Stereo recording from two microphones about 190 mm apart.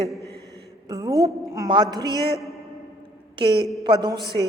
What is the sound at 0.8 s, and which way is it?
A woman's voice, 20° right (ahead or behind).